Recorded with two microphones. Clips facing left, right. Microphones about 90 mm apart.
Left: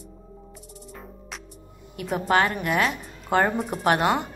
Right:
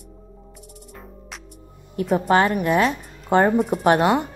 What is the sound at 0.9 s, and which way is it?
Music, centre (ahead or behind).